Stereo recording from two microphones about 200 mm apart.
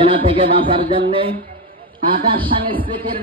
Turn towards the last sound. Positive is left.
turn(degrees=-25)  # may be behind; listen again after turning